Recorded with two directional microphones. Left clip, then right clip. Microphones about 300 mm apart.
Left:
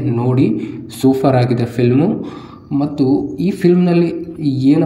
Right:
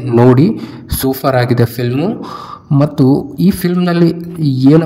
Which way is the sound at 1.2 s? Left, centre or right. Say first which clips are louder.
Right 2 dB; centre.